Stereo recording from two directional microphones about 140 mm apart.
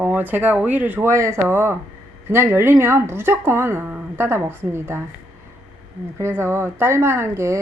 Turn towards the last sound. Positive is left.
turn(degrees=-20)  # may be behind; listen again after turning